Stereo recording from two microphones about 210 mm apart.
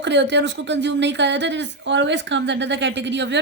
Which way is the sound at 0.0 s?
55° right (ahead or behind).